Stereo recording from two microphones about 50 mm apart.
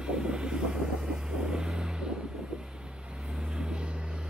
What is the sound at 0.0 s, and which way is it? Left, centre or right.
Vehicle, centre.